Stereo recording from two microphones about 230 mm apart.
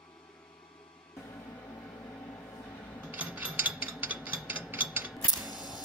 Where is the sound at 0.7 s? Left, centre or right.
Left.